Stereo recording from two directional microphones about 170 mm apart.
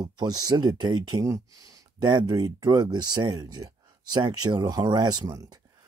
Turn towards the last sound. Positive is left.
turn(degrees=-20)  # may be behind; listen again after turning